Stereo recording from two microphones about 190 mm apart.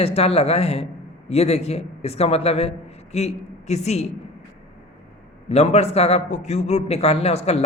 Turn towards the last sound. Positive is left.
turn(degrees=35)  # may be behind; listen again after turning